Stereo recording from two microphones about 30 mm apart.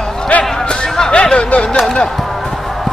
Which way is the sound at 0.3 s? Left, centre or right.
Left.